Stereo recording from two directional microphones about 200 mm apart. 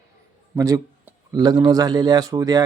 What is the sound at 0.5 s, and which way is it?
Speech, 15° right (ahead or behind).